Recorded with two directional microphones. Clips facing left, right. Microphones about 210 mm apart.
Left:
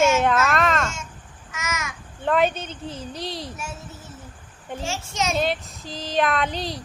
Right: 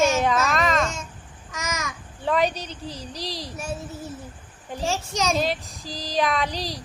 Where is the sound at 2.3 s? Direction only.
Centre (ahead or behind).